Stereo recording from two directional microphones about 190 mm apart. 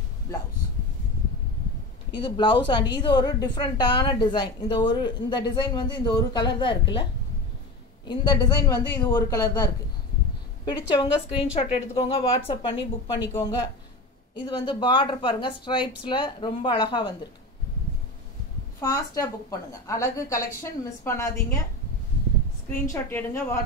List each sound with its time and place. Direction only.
2.1 s a woman's voice: 25° left (ahead or behind)
8.1 s a woman's voice: 20° left (ahead or behind)
18.8 s a woman's voice: 15° left (ahead or behind)
22.7 s a woman's voice: 10° left (ahead or behind)